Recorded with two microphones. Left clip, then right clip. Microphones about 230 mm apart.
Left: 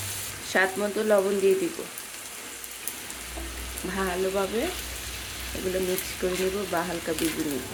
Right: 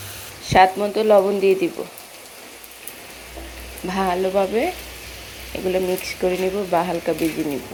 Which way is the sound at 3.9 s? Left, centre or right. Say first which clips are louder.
Right 8 dB; centre.